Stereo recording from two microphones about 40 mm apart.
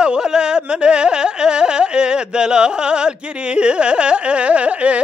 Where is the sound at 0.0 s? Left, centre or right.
Right.